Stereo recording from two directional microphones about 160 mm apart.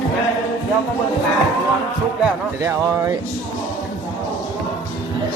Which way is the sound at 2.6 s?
20° right (ahead or behind).